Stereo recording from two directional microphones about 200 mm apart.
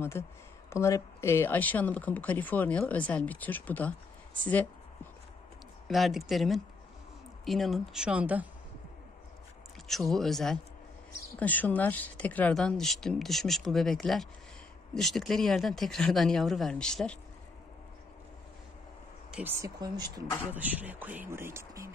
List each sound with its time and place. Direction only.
0.2 s speech: 10° left (ahead or behind)
5.9 s speech: centre (ahead or behind)
9.8 s speech: centre (ahead or behind)
19.3 s speech: 15° right (ahead or behind)
20.5 s speech: 10° right (ahead or behind)